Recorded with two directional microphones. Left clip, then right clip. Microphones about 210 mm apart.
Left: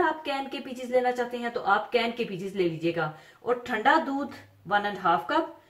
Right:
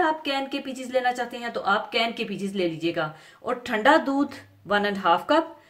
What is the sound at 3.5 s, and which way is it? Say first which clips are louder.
A woman's voice: right 3 dB; 45° right (ahead or behind).